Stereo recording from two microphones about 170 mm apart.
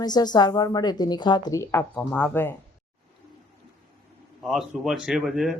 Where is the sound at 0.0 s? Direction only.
25° left (ahead or behind).